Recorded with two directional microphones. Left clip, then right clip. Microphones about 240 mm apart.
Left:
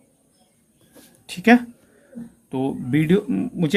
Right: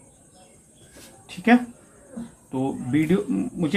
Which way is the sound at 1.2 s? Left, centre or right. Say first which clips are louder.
Left 3 dB; left.